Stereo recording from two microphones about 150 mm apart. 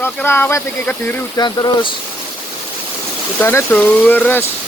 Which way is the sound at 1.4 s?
25° left (ahead or behind).